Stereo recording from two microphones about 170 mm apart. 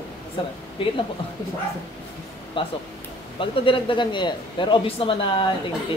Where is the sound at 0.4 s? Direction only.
30° left (ahead or behind).